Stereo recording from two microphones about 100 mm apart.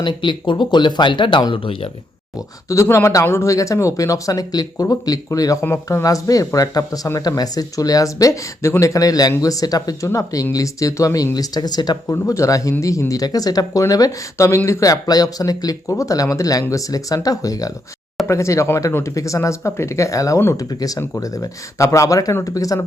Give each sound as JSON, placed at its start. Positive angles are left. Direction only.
{"t": 0.0, "sound": "speech", "side_deg": 50}
{"t": 2.6, "sound": "speech", "side_deg": 30}
{"t": 12.0, "sound": "speech", "side_deg": 30}
{"t": 20.7, "sound": "speech", "side_deg": 40}